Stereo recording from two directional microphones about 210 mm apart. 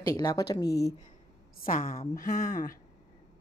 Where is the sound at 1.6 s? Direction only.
40° left (ahead or behind).